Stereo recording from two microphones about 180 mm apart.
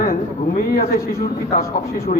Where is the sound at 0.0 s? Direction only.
55° left (ahead or behind).